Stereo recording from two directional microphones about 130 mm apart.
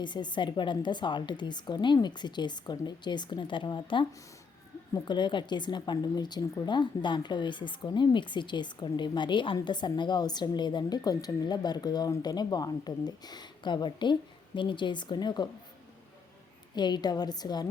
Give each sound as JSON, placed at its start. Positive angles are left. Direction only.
{"t": 0.0, "sound": "a woman's voice", "side_deg": 35}
{"t": 16.7, "sound": "a woman's voice", "side_deg": 35}